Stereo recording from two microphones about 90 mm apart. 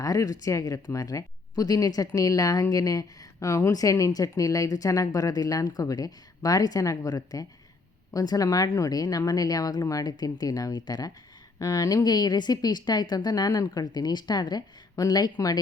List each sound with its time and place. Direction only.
0.0 s a woman's voice: 40° left (ahead or behind)